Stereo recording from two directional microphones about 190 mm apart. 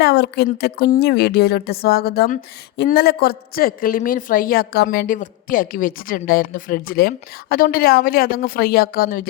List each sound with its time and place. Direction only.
0.0 s a woman's voice: 60° left (ahead or behind)